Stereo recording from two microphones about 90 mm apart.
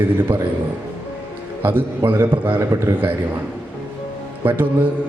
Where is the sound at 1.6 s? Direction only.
20° right (ahead or behind).